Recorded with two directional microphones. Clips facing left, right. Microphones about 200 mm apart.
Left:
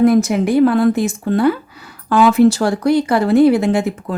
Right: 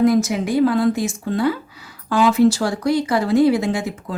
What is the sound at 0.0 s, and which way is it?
Speech, 60° left (ahead or behind).